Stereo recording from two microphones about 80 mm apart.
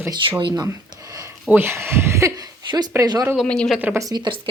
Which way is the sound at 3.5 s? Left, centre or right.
Centre.